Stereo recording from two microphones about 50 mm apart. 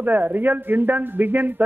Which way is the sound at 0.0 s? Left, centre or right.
Right.